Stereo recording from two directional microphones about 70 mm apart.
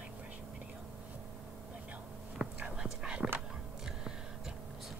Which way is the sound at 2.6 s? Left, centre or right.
Centre.